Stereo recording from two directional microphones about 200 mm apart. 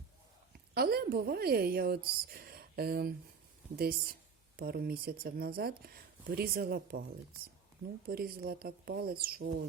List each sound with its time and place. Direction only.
0.7 s speech: 50° right (ahead or behind)
8.0 s speech: 50° right (ahead or behind)